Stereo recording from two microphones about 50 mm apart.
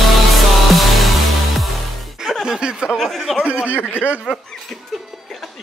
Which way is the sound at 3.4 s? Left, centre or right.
Right.